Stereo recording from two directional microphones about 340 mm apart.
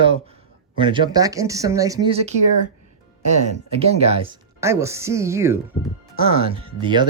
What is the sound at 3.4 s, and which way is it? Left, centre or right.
Speech, centre.